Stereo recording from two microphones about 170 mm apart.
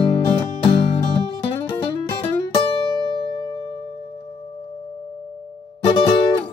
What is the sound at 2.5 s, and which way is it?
Music, 30° left (ahead or behind).